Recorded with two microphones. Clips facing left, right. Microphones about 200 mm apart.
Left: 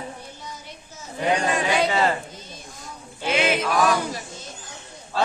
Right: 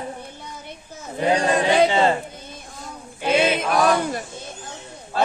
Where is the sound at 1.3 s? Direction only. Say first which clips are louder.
Right 4 dB; 35° right (ahead or behind).